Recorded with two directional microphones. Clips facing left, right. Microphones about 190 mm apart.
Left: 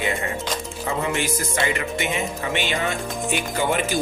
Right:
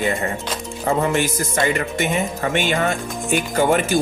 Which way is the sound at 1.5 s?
45° right (ahead or behind).